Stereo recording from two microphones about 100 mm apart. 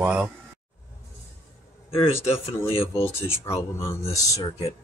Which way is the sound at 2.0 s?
25° left (ahead or behind).